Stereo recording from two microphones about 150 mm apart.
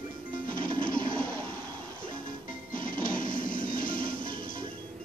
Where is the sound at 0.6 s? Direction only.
65° left (ahead or behind).